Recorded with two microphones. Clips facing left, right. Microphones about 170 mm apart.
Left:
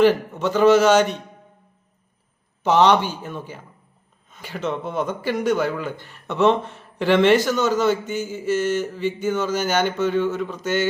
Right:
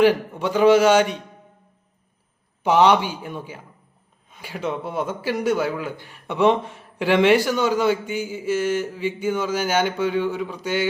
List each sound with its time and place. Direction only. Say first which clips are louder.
0.0 s speech: left 1 dB; 10° right (ahead or behind)
2.6 s speech: even; 10° right (ahead or behind)